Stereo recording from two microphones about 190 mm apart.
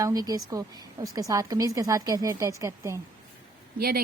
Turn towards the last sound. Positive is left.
turn(degrees=-55)  # may be behind; listen again after turning